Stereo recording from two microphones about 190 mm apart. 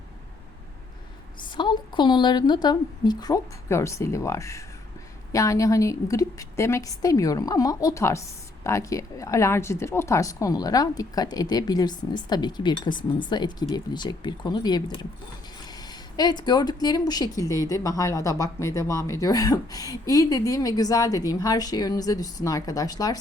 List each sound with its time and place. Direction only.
1.5 s a woman's voice: 25° left (ahead or behind)